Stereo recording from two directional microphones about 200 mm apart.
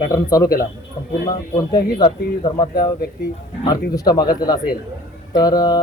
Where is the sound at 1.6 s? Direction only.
20° left (ahead or behind).